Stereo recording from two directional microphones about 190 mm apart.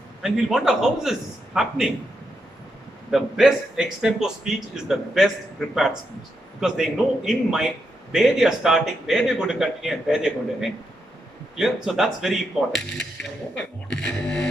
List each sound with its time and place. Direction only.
0.2 s a man's voice: 5° right (ahead or behind)
3.1 s a man's voice: centre (ahead or behind)